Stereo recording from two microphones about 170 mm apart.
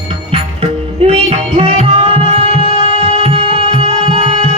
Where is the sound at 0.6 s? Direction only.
35° right (ahead or behind).